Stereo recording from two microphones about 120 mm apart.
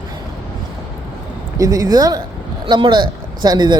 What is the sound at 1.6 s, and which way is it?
A man's voice, 30° right (ahead or behind).